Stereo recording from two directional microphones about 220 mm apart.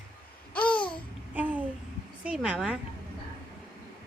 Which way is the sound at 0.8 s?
20° left (ahead or behind).